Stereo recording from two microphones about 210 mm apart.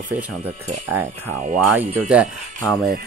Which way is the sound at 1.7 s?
10° right (ahead or behind).